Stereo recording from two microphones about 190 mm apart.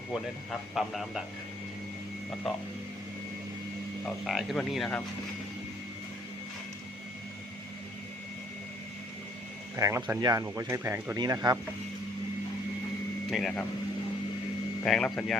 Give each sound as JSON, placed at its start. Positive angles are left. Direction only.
{"t": 0.7, "sound": "speech", "side_deg": 0}
{"t": 4.0, "sound": "speech", "side_deg": 0}
{"t": 9.7, "sound": "speech", "side_deg": -15}
{"t": 13.3, "sound": "speech", "side_deg": 0}
{"t": 14.8, "sound": "speech", "side_deg": 5}